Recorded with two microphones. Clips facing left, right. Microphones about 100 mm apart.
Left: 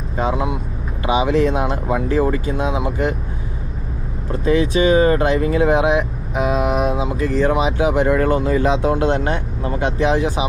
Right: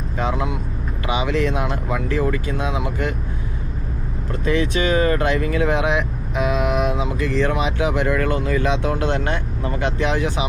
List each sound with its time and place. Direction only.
1.0 s speech: 25° left (ahead or behind)
4.4 s speech: 30° left (ahead or behind)